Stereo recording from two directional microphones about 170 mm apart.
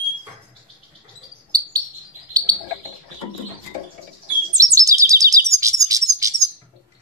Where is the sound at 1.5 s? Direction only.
20° right (ahead or behind).